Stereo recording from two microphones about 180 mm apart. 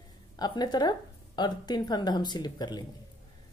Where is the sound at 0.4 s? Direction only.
20° left (ahead or behind).